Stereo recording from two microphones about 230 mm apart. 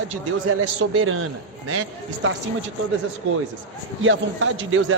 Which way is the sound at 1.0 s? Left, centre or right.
Right.